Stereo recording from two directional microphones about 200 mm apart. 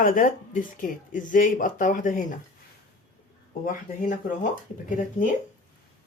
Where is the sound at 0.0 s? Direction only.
40° left (ahead or behind).